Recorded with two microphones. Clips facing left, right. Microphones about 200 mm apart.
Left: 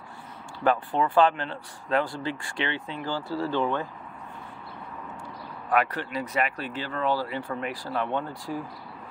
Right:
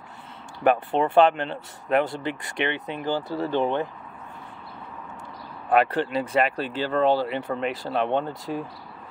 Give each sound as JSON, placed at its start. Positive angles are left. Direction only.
{"t": 0.7, "sound": "speech", "side_deg": -25}
{"t": 5.7, "sound": "speech", "side_deg": -30}